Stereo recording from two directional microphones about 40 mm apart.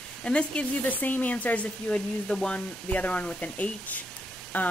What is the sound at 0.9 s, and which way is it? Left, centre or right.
Speech, left.